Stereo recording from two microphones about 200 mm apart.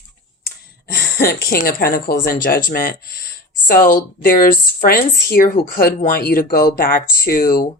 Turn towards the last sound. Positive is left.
turn(degrees=45)  # may be behind; listen again after turning